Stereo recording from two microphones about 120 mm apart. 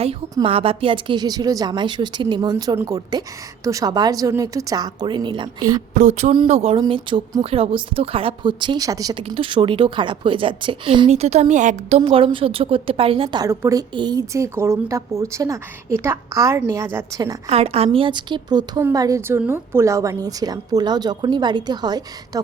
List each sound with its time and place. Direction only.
0.4 s a woman's voice: 50° right (ahead or behind)
5.9 s speech: 85° right
6.5 s a woman's voice: 55° right (ahead or behind); by 9.1 s 30° right (ahead or behind)
9.3 s a woman's voice: 45° right (ahead or behind)
11.1 s a woman's voice: 65° right (ahead or behind)
12.1 s a woman's voice: 50° right (ahead or behind)
13.4 s a woman's voice: 25° right (ahead or behind)
13.9 s a woman's voice: 35° right (ahead or behind)
17.5 s a woman's voice: 55° right (ahead or behind); by 22.0 s 35° right (ahead or behind)